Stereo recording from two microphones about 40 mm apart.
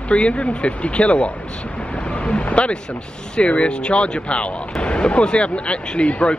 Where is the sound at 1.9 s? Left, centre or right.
Left.